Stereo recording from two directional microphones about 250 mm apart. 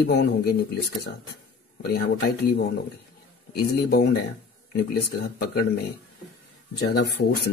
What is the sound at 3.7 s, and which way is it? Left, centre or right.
Speech, left.